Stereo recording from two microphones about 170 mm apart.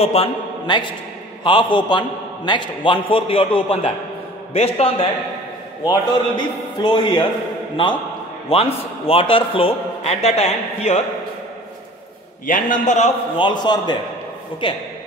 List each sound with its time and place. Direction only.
0.0 s a man's voice: 35° left (ahead or behind)
5.9 s a man's voice: 25° left (ahead or behind)
12.4 s a man's voice: 55° left (ahead or behind)
13.4 s a man's voice: 25° left (ahead or behind)